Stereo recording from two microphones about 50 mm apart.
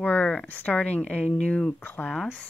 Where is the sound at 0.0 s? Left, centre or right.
Left.